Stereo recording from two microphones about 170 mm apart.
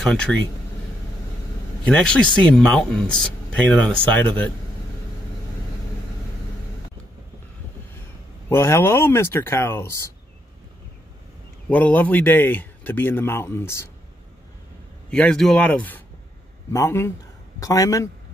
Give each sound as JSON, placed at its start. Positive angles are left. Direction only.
{"t": 0.0, "sound": "speech", "side_deg": 5}
{"t": 1.9, "sound": "speech", "side_deg": 5}
{"t": 8.5, "sound": "speech", "side_deg": 15}
{"t": 11.7, "sound": "speech", "side_deg": 10}
{"t": 15.0, "sound": "a man's voice", "side_deg": 5}